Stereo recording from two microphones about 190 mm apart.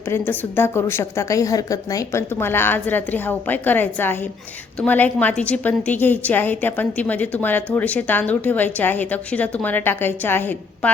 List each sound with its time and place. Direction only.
0.1 s a woman's voice: 10° left (ahead or behind)